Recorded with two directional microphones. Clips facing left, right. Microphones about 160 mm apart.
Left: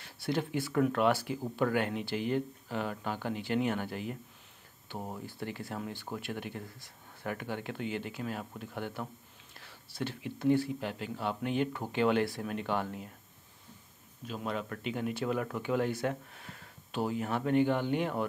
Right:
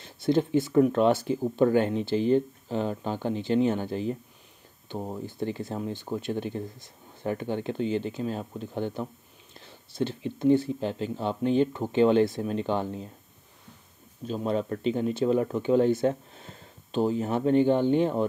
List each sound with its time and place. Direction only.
0.0 s speech: 25° right (ahead or behind)
14.2 s speech: 30° right (ahead or behind)